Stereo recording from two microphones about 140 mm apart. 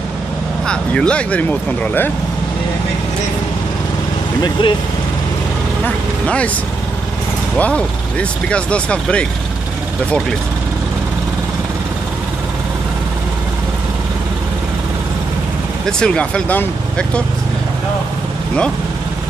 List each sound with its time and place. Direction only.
0.7 s speech: 5° left (ahead or behind)
4.4 s speech: 35° left (ahead or behind)
5.9 s speech: 10° left (ahead or behind)
7.5 s speech: 10° left (ahead or behind)
16.0 s speech: 5° left (ahead or behind)